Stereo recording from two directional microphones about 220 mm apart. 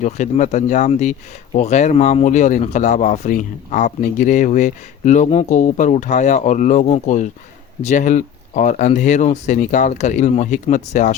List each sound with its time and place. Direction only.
0.0 s speech: 35° left (ahead or behind)